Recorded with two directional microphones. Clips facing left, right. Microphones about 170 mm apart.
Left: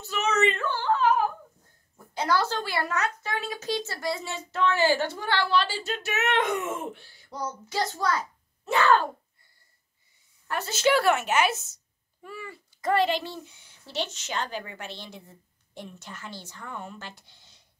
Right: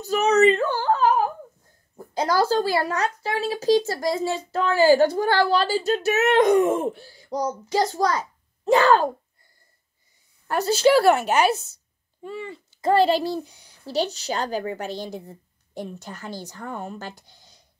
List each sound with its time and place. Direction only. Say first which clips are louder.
0.0 s a sound: right 8 dB; 40° right (ahead or behind)
2.0 s speech: right 4 dB; 35° right (ahead or behind)
10.5 s speech: right 6 dB; 35° right (ahead or behind)